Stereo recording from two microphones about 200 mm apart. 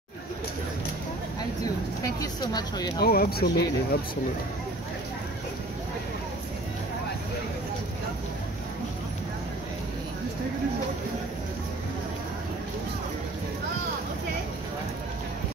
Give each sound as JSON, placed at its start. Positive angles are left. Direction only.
{"t": 2.1, "sound": "speech", "side_deg": 20}
{"t": 3.0, "sound": "speech", "side_deg": 50}